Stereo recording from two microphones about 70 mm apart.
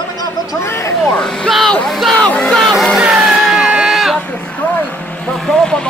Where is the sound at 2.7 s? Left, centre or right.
Centre.